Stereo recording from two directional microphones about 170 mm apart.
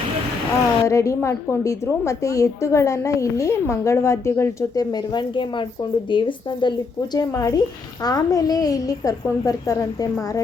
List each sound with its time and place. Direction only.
0.9 s a woman's voice: 15° left (ahead or behind)